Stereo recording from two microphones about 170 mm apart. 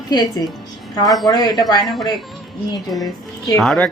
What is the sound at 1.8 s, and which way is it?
Speech, centre (ahead or behind).